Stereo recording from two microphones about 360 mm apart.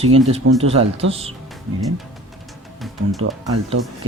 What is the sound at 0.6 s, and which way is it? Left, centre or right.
Speech, centre.